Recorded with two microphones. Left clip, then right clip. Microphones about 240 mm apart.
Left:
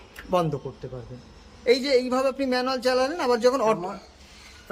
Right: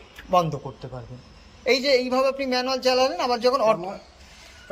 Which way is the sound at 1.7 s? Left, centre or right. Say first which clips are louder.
Right 1 dB; centre.